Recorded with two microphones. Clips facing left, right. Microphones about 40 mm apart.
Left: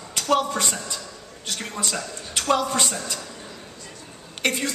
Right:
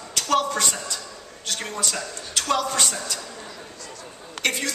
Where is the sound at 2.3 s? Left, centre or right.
Left.